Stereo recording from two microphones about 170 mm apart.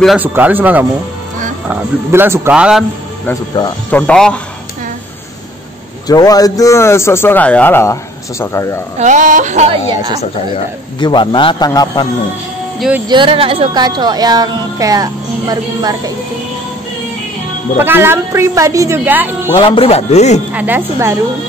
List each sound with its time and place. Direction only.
0.0 s a woman's voice: centre (ahead or behind)
3.9 s speech: 5° left (ahead or behind)
6.0 s a man's voice: 20° left (ahead or behind)
8.9 s speech: 45° right (ahead or behind)
10.5 s a man's voice: 25° left (ahead or behind)
12.7 s music: centre (ahead or behind)
13.1 s speech: 30° right (ahead or behind)
17.7 s a woman's voice: 15° right (ahead or behind)
19.6 s speech: 30° left (ahead or behind)
20.5 s a woman's voice: 10° right (ahead or behind)